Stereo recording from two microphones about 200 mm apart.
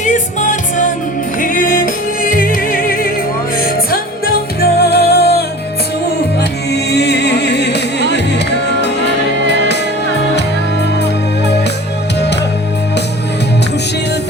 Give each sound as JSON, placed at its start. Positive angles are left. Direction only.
{"t": 0.0, "sound": "music", "side_deg": 40}
{"t": 6.7, "sound": "music", "side_deg": 55}